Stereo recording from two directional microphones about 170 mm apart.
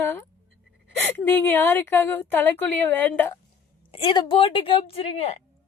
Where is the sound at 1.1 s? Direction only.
10° left (ahead or behind).